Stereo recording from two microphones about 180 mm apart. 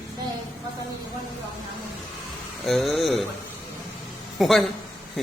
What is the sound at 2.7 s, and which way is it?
Speech, centre (ahead or behind).